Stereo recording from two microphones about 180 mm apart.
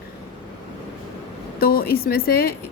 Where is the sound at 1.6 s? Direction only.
55° left (ahead or behind).